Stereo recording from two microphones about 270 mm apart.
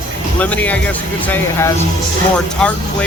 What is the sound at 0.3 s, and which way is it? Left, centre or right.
Speech, centre.